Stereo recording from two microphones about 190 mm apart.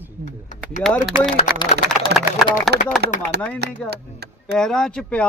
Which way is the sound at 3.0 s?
60° right (ahead or behind).